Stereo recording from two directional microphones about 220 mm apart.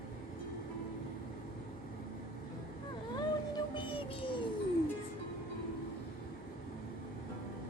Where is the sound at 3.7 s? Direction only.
25° left (ahead or behind).